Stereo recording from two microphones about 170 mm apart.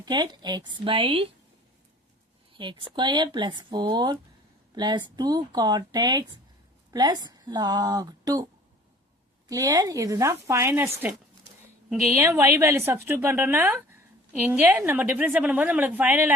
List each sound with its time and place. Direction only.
0.0 s speech: 25° right (ahead or behind)
2.5 s speech: 30° right (ahead or behind)
9.5 s speech: 20° right (ahead or behind)
12.1 s a woman's voice: 15° right (ahead or behind)